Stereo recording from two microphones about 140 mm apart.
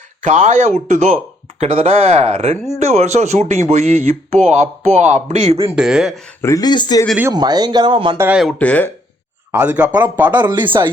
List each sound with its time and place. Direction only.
0.2 s speech: 60° right (ahead or behind)
5.7 s speech: 5° right (ahead or behind)
6.4 s speech: 25° left (ahead or behind)
7.3 s speech: 30° right (ahead or behind)
8.5 s speech: 10° left (ahead or behind)
9.5 s speech: 10° right (ahead or behind)